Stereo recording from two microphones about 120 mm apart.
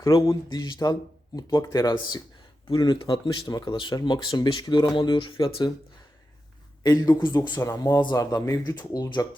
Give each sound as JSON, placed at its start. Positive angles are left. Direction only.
{"t": 0.2, "sound": "speech", "side_deg": 30}
{"t": 6.8, "sound": "speech", "side_deg": 30}
{"t": 7.6, "sound": "speech", "side_deg": 20}